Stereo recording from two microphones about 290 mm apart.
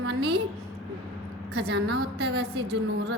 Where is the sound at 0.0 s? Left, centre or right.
Right.